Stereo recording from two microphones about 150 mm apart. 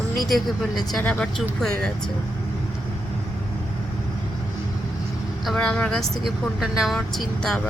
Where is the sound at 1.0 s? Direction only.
10° left (ahead or behind).